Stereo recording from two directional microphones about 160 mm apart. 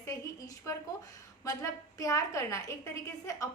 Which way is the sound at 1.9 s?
20° left (ahead or behind).